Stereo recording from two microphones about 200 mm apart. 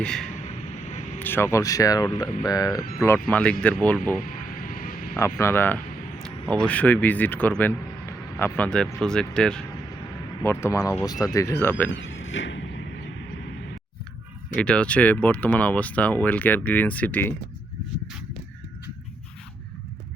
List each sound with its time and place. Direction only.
0.0 s speech: 5° left (ahead or behind)
0.4 s vehicle: 35° left (ahead or behind)
1.2 s speech: 10° left (ahead or behind)
3.2 s speech: 10° left (ahead or behind)
4.2 s a sound: 45° left (ahead or behind)
5.1 s a sound: 10° left (ahead or behind)
6.5 s a man's voice: 5° left (ahead or behind)
11.9 s speech: 70° left (ahead or behind)
14.5 s speech: 5° left (ahead or behind)